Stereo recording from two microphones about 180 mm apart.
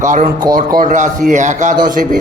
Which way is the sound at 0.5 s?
Centre (ahead or behind).